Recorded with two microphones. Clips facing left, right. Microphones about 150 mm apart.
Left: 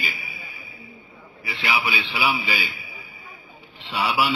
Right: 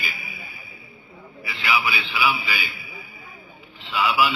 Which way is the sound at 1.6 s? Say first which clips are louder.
Right 1 dB; 35° left (ahead or behind).